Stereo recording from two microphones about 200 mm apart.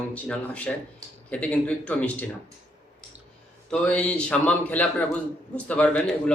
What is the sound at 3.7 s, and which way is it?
A man's voice, 5° left (ahead or behind).